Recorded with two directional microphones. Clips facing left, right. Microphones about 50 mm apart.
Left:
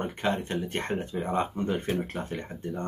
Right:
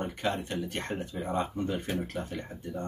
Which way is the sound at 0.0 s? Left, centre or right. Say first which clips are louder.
Left 3 dB; left.